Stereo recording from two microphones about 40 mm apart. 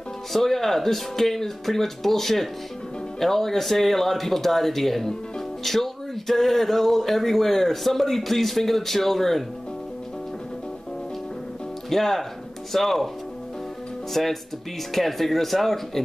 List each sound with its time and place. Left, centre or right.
0.3 s speech: centre
11.9 s speech: centre
14.1 s speech: centre